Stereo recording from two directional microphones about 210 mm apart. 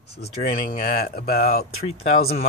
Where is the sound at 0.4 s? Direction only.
40° left (ahead or behind).